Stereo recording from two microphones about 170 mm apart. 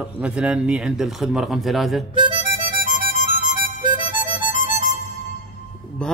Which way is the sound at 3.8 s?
25° right (ahead or behind).